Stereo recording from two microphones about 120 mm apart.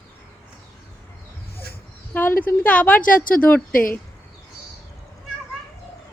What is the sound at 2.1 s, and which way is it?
Speech, 15° left (ahead or behind).